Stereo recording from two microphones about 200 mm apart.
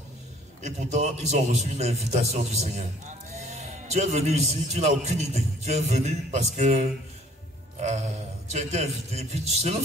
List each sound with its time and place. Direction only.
0.6 s a man's voice: 35° right (ahead or behind)
8.5 s a man's voice: 35° right (ahead or behind)